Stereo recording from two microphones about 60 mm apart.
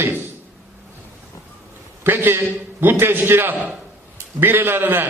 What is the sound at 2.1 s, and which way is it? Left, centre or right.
A man's voice, right.